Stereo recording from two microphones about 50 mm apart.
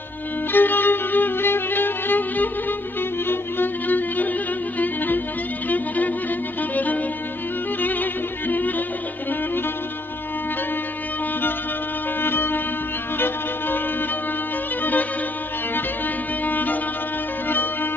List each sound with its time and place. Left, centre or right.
0.5 s violin: left
3.3 s music: left
12.2 s music: left
14.8 s music: left
16.4 s music: left